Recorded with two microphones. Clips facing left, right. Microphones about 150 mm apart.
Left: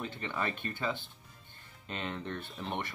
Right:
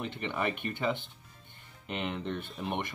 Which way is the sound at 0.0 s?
15° right (ahead or behind).